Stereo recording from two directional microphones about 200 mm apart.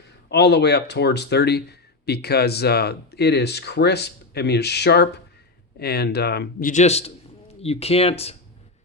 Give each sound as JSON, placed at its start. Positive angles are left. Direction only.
{"t": 0.3, "sound": "speech", "side_deg": 55}